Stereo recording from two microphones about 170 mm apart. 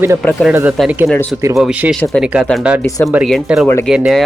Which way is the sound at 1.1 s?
10° left (ahead or behind).